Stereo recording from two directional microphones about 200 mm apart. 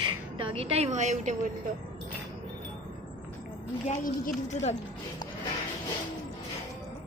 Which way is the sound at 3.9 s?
40° left (ahead or behind).